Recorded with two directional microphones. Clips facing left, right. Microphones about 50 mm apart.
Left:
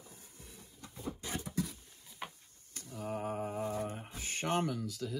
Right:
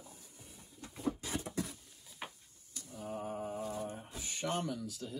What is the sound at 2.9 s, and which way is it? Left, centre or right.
Mantra, left.